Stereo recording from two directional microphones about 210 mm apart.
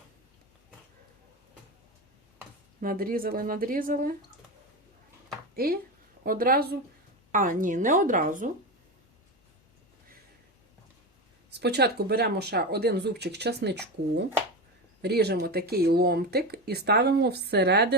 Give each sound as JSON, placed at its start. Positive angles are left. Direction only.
{"t": 2.8, "sound": "speech", "side_deg": -45}
{"t": 5.5, "sound": "a woman's voice", "side_deg": -45}
{"t": 11.6, "sound": "speech", "side_deg": -50}